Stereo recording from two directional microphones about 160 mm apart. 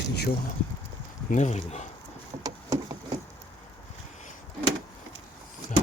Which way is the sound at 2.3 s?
35° right (ahead or behind).